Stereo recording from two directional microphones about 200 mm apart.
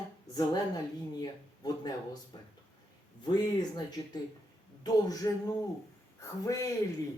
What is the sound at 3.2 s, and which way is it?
Speech, 20° left (ahead or behind).